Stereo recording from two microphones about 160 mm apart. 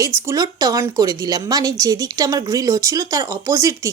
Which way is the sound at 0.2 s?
20° right (ahead or behind).